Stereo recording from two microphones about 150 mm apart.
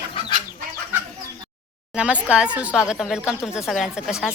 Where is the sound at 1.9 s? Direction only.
5° right (ahead or behind).